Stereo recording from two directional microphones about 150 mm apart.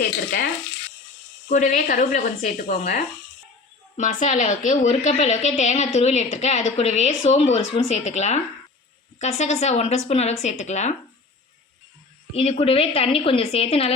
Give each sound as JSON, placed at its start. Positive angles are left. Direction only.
{"t": 0.0, "sound": "speech", "side_deg": 90}
{"t": 1.5, "sound": "a woman's voice", "side_deg": 60}
{"t": 9.4, "sound": "a woman's voice", "side_deg": 50}
{"t": 12.3, "sound": "a woman's voice", "side_deg": 40}